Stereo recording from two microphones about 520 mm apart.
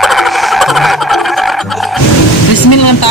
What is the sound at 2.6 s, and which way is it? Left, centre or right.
Speech, left.